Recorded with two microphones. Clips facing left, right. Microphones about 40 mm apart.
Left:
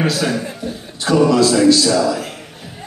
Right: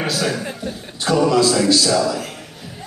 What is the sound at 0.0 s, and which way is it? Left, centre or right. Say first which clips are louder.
A man's voice: left 3 dB; centre.